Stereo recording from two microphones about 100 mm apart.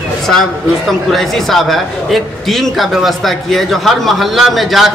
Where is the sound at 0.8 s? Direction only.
Centre (ahead or behind).